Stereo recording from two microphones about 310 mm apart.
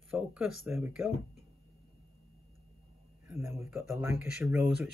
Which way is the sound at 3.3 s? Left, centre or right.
Centre.